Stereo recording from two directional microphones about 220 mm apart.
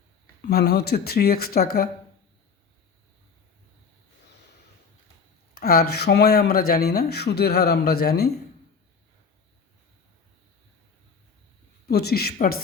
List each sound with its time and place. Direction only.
0.4 s speech: 45° left (ahead or behind)
5.5 s speech: 40° left (ahead or behind)
11.9 s speech: 45° left (ahead or behind)